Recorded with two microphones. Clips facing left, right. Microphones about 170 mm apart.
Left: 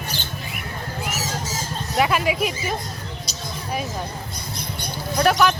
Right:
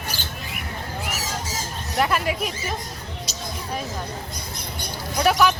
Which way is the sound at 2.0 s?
5° left (ahead or behind).